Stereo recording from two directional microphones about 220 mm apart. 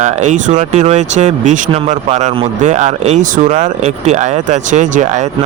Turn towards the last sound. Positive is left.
turn(degrees=-35)  # may be behind; listen again after turning